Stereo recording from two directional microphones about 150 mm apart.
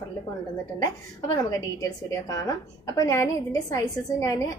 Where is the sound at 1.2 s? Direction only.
20° left (ahead or behind).